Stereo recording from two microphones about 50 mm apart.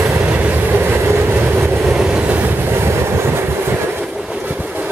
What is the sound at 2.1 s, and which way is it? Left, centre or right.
Train, right.